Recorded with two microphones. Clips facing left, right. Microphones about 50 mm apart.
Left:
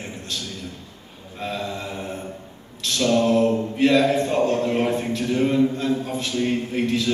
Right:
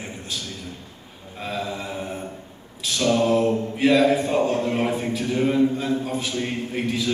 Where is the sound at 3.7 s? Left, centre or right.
Centre.